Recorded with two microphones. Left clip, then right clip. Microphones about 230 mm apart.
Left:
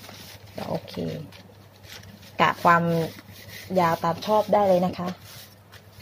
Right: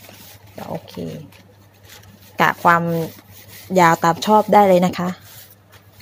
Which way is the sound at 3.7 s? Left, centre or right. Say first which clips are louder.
Right 9 dB; right.